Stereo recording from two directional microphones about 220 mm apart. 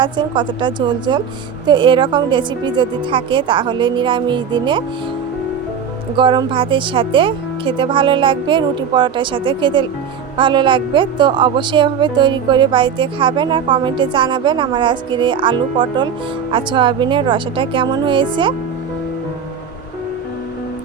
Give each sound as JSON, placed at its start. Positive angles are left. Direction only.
{"t": 0.0, "sound": "a woman's voice", "side_deg": -20}
{"t": 6.1, "sound": "a woman's voice", "side_deg": -20}